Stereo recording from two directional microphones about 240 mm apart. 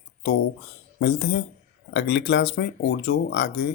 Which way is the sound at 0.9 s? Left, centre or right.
Left.